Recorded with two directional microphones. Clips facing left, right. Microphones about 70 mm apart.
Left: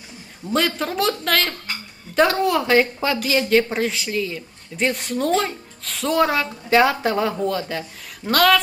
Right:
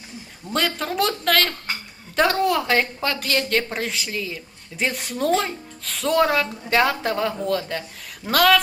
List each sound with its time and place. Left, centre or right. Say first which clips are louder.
0.5 s a woman's voice: left 2 dB; centre